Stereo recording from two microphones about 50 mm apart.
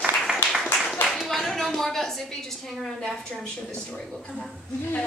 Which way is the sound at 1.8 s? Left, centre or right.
Centre.